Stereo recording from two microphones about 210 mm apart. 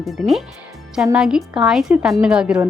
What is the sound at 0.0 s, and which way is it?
Speech, centre (ahead or behind).